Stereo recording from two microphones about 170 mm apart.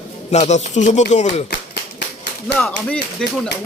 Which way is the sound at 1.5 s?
80° left.